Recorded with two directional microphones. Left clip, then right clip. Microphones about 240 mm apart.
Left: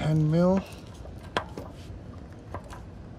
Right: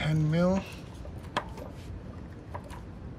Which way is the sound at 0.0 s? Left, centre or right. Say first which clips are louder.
Left 3 dB; centre.